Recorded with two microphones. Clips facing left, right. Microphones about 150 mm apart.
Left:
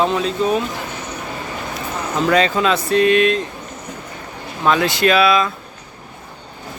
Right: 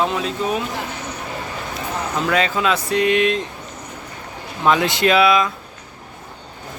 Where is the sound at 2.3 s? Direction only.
5° right (ahead or behind).